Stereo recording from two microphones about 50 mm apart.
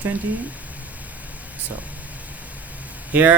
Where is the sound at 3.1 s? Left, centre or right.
Right.